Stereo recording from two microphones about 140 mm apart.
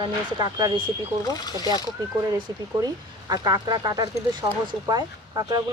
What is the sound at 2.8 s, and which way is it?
Speech, 25° right (ahead or behind).